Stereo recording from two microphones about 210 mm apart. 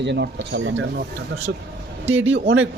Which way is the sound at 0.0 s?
55° right (ahead or behind).